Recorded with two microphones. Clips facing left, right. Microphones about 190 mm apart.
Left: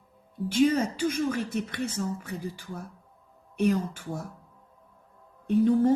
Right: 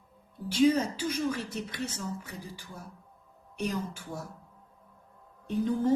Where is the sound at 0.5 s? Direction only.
50° left (ahead or behind).